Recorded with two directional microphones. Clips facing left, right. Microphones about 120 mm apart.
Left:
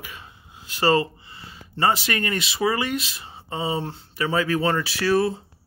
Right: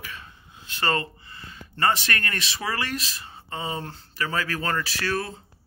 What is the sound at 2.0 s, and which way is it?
Speech, 25° left (ahead or behind).